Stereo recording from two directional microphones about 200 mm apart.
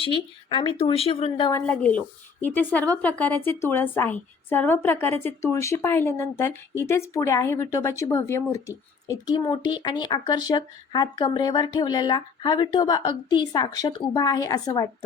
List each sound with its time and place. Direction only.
0.0 s speech: 25° left (ahead or behind)
1.6 s a woman's voice: 10° left (ahead or behind)